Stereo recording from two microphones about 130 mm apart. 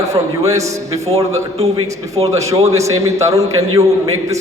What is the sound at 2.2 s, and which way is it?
A man's voice, 25° right (ahead or behind).